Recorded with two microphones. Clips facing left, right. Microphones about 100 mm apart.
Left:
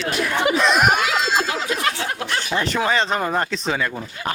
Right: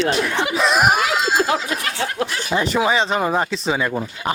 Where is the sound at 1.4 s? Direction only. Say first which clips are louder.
Right 6 dB; 35° right (ahead or behind).